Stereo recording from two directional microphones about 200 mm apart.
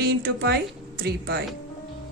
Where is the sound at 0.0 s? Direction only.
50° right (ahead or behind).